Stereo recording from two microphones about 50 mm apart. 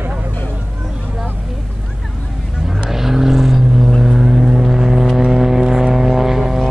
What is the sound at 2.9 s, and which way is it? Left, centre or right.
Vehicle, centre.